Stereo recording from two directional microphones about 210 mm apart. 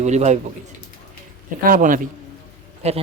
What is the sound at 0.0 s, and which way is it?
Speech, 35° right (ahead or behind).